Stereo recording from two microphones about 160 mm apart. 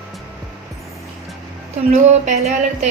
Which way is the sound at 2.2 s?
45° right (ahead or behind).